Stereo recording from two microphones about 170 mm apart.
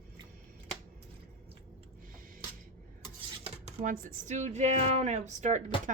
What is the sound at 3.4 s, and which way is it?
Speech, 40° right (ahead or behind).